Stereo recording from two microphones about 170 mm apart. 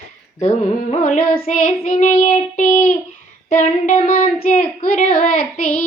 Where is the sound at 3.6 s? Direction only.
45° left (ahead or behind).